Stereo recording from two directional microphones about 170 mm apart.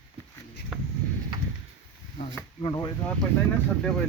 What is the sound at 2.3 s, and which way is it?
Speech, 25° left (ahead or behind).